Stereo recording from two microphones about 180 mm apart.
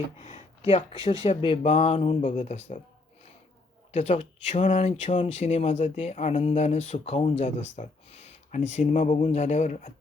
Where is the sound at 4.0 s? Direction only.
35° left (ahead or behind).